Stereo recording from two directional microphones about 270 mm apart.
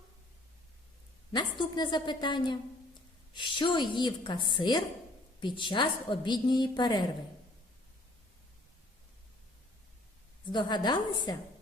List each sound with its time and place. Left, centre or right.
1.3 s a woman's voice: centre
10.5 s a woman's voice: centre